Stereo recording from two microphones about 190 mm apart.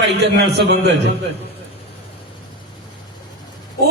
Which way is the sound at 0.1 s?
65° right (ahead or behind).